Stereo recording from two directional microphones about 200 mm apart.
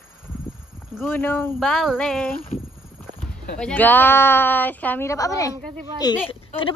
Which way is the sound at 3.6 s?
5° left (ahead or behind).